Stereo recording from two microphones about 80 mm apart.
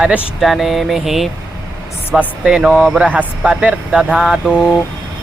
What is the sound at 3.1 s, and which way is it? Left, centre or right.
Speech, centre.